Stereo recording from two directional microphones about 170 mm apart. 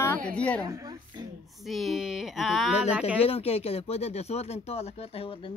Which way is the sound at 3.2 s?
35° left (ahead or behind).